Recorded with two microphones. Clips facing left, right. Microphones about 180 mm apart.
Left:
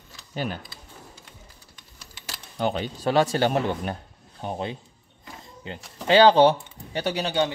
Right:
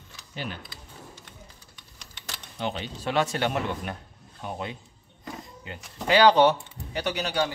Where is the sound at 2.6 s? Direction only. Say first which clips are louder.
Left 6 dB; 40° left (ahead or behind).